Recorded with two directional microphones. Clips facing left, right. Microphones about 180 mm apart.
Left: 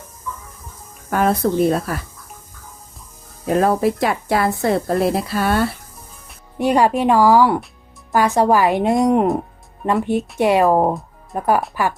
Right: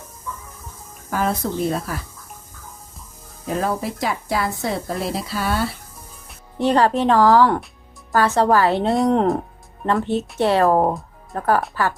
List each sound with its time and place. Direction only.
1.1 s speech: 60° left (ahead or behind)
3.4 s speech: 65° left (ahead or behind)
6.6 s speech: 10° left (ahead or behind)